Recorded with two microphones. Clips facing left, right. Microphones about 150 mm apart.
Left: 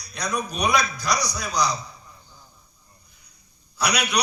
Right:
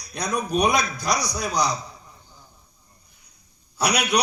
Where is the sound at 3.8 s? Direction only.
50° right (ahead or behind).